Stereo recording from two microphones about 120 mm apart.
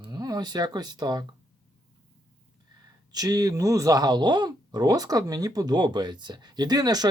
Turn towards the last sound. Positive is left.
turn(degrees=-35)  # may be behind; listen again after turning